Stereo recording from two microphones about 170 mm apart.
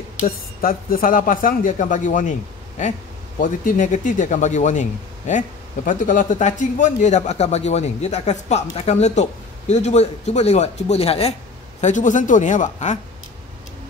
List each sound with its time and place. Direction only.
0.2 s speech: 60° left (ahead or behind)
3.3 s a man's voice: 50° left (ahead or behind)
11.8 s speech: 45° left (ahead or behind)